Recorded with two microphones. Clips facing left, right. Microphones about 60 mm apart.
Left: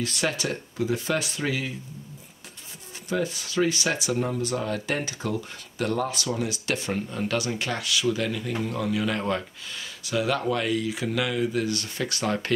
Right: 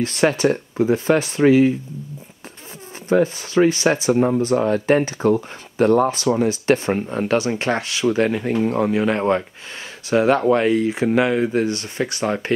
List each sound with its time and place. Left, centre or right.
0.0 s speech: right
3.1 s speech: right